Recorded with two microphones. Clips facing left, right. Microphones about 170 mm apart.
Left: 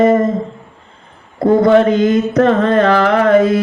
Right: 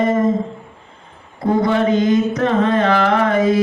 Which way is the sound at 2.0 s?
60° left (ahead or behind).